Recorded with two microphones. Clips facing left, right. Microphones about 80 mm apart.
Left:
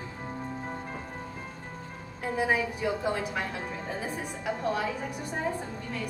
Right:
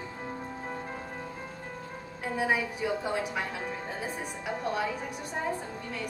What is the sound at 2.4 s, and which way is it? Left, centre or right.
Speech, centre.